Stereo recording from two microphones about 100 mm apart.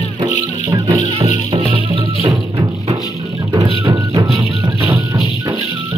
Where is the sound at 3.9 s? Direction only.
50° right (ahead or behind).